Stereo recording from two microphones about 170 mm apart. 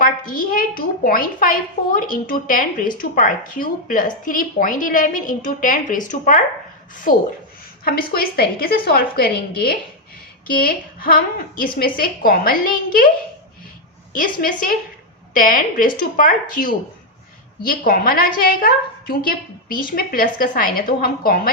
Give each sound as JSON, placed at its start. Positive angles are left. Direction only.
{"t": 0.0, "sound": "a woman's voice", "side_deg": 55}
{"t": 14.1, "sound": "a woman's voice", "side_deg": 55}